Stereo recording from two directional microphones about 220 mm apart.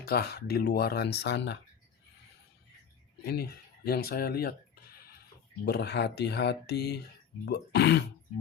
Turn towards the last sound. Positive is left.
turn(degrees=50)  # may be behind; listen again after turning